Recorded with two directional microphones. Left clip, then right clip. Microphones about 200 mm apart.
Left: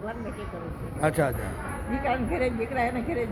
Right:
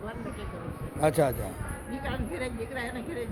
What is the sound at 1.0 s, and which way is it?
Speech, 35° right (ahead or behind).